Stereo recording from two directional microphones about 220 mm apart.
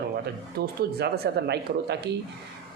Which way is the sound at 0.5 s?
45° right (ahead or behind).